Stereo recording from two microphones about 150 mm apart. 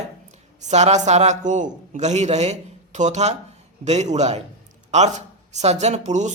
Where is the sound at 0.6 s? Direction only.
45° right (ahead or behind).